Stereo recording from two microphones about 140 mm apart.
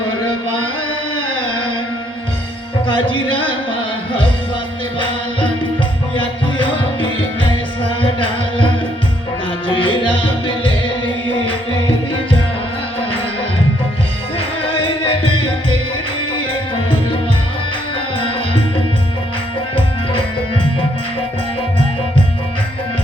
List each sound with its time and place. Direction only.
2.8 s music: 35° left (ahead or behind)
8.2 s music: 40° left (ahead or behind)
9.7 s music: 40° left (ahead or behind)
14.3 s music: 40° left (ahead or behind)